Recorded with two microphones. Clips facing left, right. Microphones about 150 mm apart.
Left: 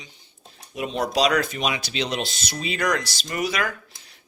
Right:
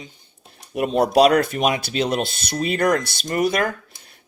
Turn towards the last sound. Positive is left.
turn(degrees=-50)  # may be behind; listen again after turning